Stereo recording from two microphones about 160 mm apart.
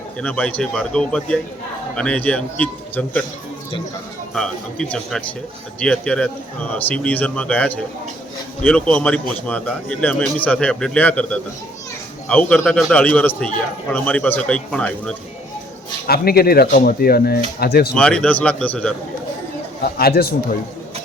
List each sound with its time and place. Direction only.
0.2 s a man's voice: 10° left (ahead or behind)
4.4 s a man's voice: 5° left (ahead or behind)
16.0 s speech: 75° left (ahead or behind)
17.9 s a man's voice: 5° left (ahead or behind)
20.0 s speech: 75° left (ahead or behind)